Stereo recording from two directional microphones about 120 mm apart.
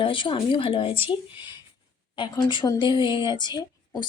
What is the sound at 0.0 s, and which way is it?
Speech, 45° left (ahead or behind).